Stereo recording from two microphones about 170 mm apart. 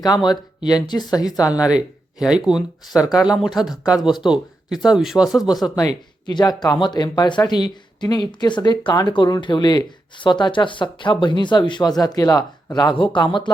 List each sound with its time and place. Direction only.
0.0 s speech: 25° left (ahead or behind)
1.6 s speech: 5° right (ahead or behind)
6.2 s speech: 25° left (ahead or behind)